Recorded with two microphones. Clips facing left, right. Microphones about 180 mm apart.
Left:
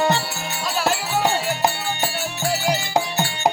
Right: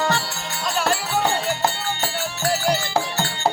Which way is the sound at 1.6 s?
15° left (ahead or behind).